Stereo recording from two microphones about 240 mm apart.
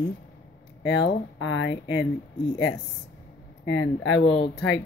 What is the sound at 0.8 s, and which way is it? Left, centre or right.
Speech, left.